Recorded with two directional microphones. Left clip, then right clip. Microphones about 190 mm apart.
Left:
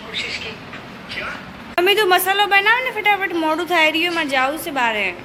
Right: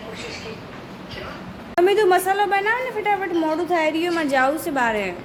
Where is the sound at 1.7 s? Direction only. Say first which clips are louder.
Left 1 dB; 20° right (ahead or behind).